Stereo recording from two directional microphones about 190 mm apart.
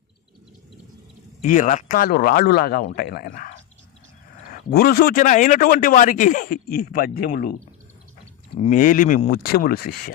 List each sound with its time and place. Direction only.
1.4 s a man's voice: 40° left (ahead or behind)
8.5 s a man's voice: 40° left (ahead or behind)